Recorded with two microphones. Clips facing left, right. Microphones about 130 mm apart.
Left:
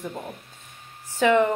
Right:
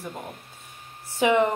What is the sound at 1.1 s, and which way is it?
Speech, 15° right (ahead or behind).